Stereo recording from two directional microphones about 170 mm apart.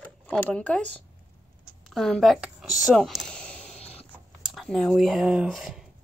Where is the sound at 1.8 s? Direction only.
Centre (ahead or behind).